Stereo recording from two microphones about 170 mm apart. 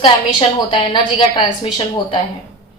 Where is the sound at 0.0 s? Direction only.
30° left (ahead or behind).